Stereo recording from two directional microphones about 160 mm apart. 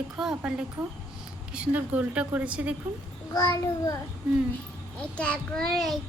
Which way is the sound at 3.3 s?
20° left (ahead or behind).